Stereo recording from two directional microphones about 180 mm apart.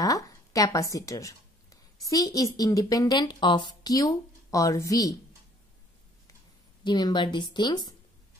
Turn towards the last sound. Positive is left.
turn(degrees=25)  # may be behind; listen again after turning